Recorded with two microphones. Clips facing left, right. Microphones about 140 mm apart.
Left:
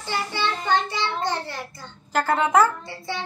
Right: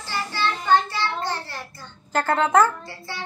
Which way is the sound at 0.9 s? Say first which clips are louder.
Even; 20° left (ahead or behind).